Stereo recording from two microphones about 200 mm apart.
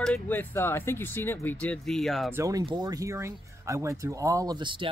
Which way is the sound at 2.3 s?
15° right (ahead or behind).